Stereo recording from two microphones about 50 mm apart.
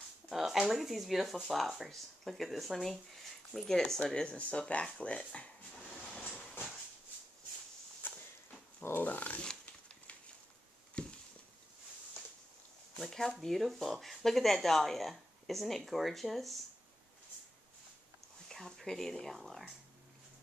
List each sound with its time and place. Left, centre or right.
0.3 s speech: centre; by 5.5 s left
8.0 s walk: left
8.9 s speech: left
9.4 s a sound: left
13.1 s speech: centre
18.5 s speech: centre